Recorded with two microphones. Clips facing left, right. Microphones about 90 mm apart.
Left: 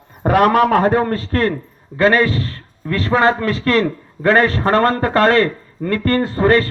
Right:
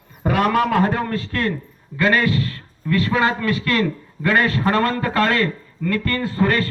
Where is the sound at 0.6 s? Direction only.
45° left (ahead or behind).